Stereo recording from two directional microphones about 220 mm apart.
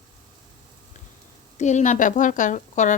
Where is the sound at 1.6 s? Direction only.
35° left (ahead or behind).